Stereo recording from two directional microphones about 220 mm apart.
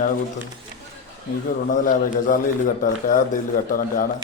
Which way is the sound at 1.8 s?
40° left (ahead or behind).